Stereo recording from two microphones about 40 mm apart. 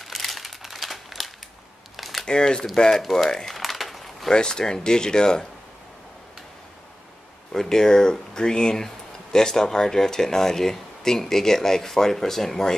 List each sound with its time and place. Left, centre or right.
0.0 s crumpling: centre
2.2 s speech: centre
3.0 s speech: centre
3.5 s a sound: centre
4.3 s speech: centre
7.5 s speech: centre